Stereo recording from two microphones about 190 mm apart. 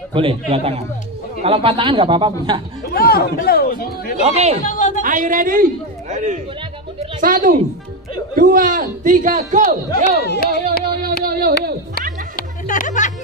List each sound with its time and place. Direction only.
0.1 s speech: 30° right (ahead or behind)
2.9 s speech: 55° left (ahead or behind)
4.3 s speech: 35° right (ahead or behind)
4.6 s a woman's voice: 40° left (ahead or behind)
5.0 s a man's voice: 45° right (ahead or behind)
7.0 s a sound: 45° right (ahead or behind)
8.4 s a man's voice: 45° right (ahead or behind)
10.2 s speech: 60° left (ahead or behind)
11.2 s a sound: 55° right (ahead or behind)
12.4 s music: 45° left (ahead or behind)